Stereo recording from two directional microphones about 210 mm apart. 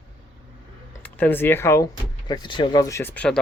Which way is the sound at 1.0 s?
5° left (ahead or behind).